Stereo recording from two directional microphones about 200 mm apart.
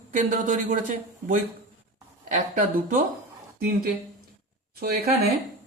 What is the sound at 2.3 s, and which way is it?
A man's voice, 40° right (ahead or behind).